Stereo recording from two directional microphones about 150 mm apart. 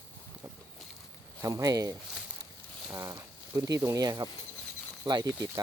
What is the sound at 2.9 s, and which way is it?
Speech, 20° right (ahead or behind).